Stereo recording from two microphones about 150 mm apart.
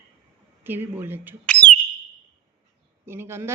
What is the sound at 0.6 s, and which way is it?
Speech, 15° right (ahead or behind).